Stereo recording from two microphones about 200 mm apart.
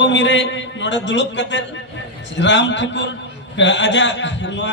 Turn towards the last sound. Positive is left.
turn(degrees=60)  # may be behind; listen again after turning